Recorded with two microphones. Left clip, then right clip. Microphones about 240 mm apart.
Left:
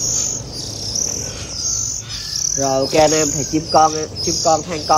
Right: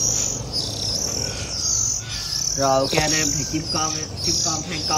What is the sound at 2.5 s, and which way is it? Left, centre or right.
Speech, centre.